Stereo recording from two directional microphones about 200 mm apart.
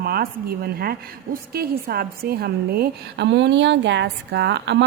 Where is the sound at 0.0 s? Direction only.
50° right (ahead or behind).